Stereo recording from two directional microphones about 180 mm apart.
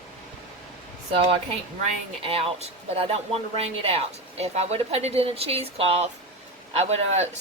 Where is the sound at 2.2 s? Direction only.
30° right (ahead or behind).